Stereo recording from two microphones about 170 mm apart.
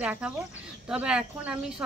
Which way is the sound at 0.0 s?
10° right (ahead or behind).